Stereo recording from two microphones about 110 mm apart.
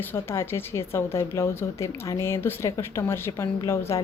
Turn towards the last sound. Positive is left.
turn(degrees=25)  # may be behind; listen again after turning